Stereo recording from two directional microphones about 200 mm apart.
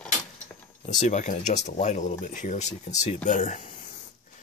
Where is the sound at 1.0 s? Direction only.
35° left (ahead or behind).